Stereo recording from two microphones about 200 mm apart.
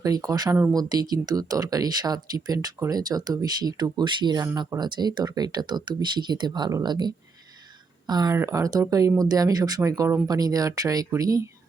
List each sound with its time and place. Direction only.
0.0 s speech: 15° right (ahead or behind)